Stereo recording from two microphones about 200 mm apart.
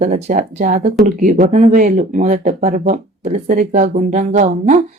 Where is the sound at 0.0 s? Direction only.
40° right (ahead or behind).